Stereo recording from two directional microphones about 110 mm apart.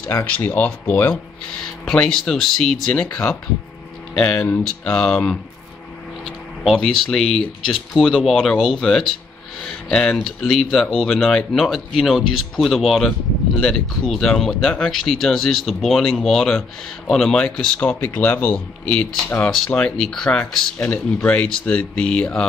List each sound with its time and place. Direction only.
0.1 s speech: 20° left (ahead or behind)
1.9 s speech: 5° left (ahead or behind)
4.8 s speech: 5° left (ahead or behind)
6.2 s speech: 5° right (ahead or behind)